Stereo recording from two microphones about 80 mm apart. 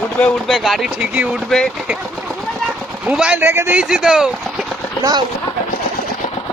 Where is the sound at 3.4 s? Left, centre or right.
Right.